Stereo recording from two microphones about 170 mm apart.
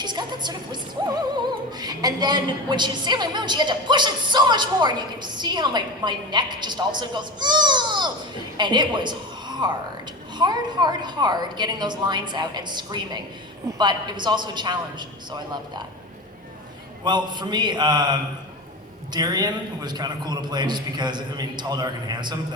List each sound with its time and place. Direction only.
0.0 s a woman's voice: 25° right (ahead or behind)
17.0 s a woman's voice: 25° right (ahead or behind)